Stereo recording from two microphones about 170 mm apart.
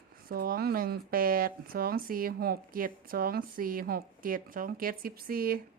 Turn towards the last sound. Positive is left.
turn(degrees=-60)  # may be behind; listen again after turning